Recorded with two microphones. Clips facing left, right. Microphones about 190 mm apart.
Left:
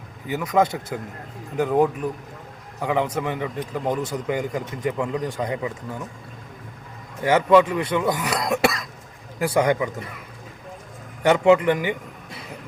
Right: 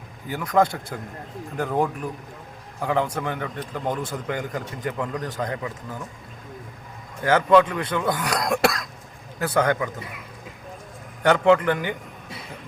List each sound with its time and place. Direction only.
0.3 s speech: 5° left (ahead or behind)
7.2 s speech: 10° left (ahead or behind)
11.2 s speech: 5° left (ahead or behind)